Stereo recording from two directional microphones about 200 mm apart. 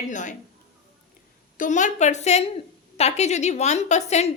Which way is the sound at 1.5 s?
40° left (ahead or behind).